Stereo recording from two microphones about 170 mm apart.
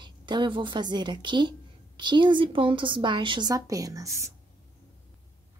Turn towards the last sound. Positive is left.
turn(degrees=-20)  # may be behind; listen again after turning